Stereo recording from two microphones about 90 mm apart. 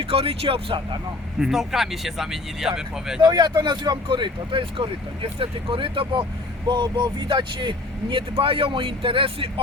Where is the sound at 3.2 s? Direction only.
50° right (ahead or behind).